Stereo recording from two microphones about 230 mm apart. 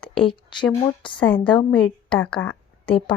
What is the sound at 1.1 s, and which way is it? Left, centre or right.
Speech, centre.